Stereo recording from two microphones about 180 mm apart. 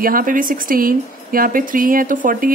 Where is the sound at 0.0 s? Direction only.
50° right (ahead or behind).